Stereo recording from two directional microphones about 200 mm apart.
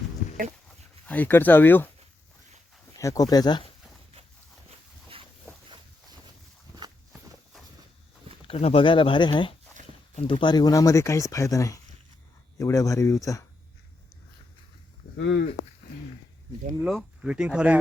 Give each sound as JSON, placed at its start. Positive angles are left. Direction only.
{"t": 0.2, "sound": "a sound", "side_deg": 40}
{"t": 1.0, "sound": "speech", "side_deg": 10}
{"t": 3.0, "sound": "speech", "side_deg": 15}
{"t": 8.4, "sound": "speech", "side_deg": 30}
{"t": 15.1, "sound": "speech", "side_deg": 60}
{"t": 16.8, "sound": "speech", "side_deg": 0}